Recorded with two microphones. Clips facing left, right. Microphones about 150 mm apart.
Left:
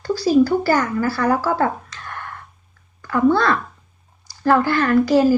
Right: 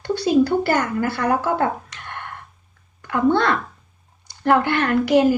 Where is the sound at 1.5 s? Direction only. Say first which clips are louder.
Left 1 dB; 40° left (ahead or behind).